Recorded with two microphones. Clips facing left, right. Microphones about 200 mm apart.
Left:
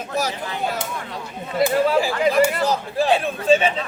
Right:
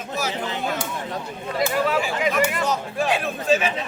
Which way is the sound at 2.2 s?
35° left (ahead or behind).